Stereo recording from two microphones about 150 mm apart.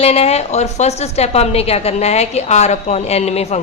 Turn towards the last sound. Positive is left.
turn(degrees=45)  # may be behind; listen again after turning